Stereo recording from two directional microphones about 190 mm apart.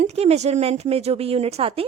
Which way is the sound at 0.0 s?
35° right (ahead or behind).